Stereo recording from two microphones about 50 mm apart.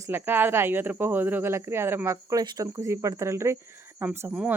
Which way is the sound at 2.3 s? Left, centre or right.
Right.